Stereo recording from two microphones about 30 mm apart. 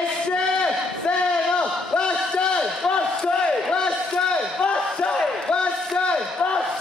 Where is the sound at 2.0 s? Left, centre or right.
Left.